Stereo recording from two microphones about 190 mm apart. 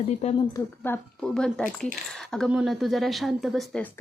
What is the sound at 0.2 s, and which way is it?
Speech, 35° left (ahead or behind).